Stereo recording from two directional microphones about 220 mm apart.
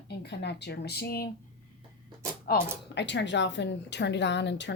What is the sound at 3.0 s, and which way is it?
A woman's voice, 55° left (ahead or behind).